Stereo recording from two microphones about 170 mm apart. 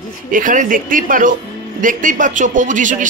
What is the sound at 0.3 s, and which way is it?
A man's voice, 50° right (ahead or behind).